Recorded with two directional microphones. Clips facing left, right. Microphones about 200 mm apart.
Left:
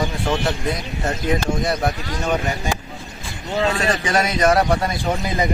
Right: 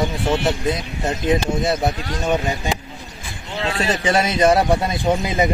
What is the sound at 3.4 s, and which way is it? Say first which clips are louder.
Speech: left 5 dB; 40° left (ahead or behind).